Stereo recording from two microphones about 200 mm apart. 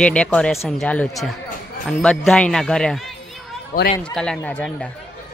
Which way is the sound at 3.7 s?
45° left (ahead or behind).